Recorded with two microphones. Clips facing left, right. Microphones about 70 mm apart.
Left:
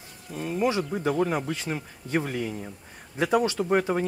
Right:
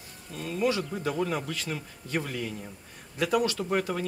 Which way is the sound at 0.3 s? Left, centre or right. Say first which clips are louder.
Left 2 dB; left.